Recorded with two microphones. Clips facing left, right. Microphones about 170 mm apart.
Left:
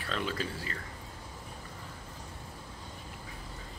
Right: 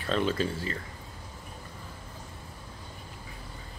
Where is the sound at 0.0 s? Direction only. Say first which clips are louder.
Right 7 dB; 30° right (ahead or behind).